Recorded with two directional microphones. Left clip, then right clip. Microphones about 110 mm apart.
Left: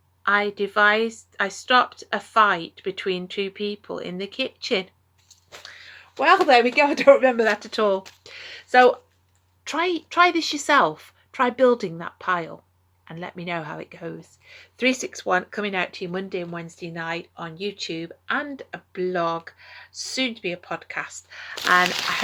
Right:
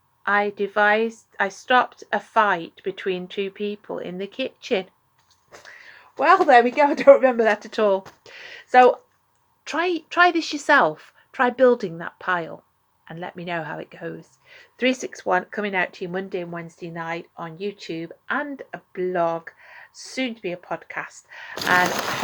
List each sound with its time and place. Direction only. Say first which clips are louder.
0.2 s speech: even; 50° left (ahead or behind)
5.6 s a sound: left 1 dB; 45° left (ahead or behind)
6.4 s speech: right 1 dB; 25° left (ahead or behind); by 21.8 s 55° left (ahead or behind)